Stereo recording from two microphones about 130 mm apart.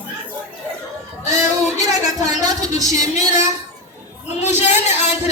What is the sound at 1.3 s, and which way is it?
Speech, 25° right (ahead or behind).